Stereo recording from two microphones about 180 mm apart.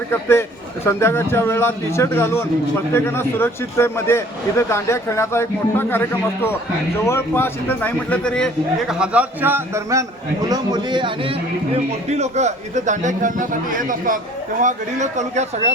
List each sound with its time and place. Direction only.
0.1 s a man's voice: 15° left (ahead or behind); by 11.3 s 30° right (ahead or behind)
12.1 s a man's voice: 40° right (ahead or behind)